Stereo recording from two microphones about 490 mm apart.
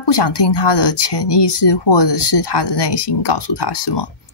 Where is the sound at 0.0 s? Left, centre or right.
Left.